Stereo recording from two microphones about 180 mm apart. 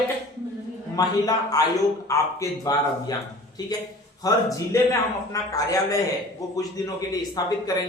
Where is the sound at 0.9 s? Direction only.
20° left (ahead or behind).